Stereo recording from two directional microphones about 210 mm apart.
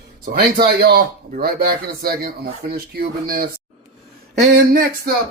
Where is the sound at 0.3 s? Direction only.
45° right (ahead or behind).